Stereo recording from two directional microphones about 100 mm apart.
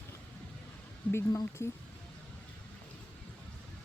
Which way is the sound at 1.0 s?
15° left (ahead or behind).